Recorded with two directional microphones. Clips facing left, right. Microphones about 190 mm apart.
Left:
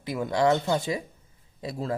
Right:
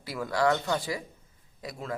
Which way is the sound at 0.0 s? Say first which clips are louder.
Left 3 dB; 20° left (ahead or behind).